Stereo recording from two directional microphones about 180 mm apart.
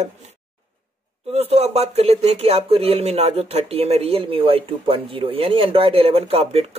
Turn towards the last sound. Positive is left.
turn(degrees=-35)  # may be behind; listen again after turning